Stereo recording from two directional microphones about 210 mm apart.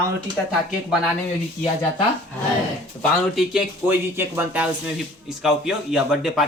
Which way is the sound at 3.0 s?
Centre (ahead or behind).